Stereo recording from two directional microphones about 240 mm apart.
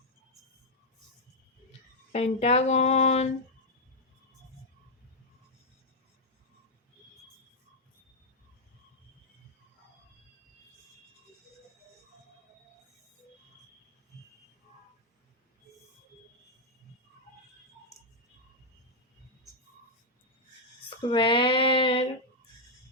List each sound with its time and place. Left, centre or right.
2.1 s speech: left
21.0 s female singing: centre